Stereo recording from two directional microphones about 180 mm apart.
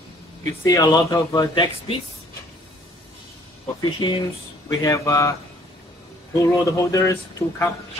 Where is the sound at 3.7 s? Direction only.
20° left (ahead or behind).